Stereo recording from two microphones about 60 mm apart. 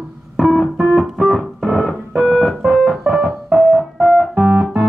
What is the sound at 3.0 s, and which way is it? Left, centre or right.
Piano, centre.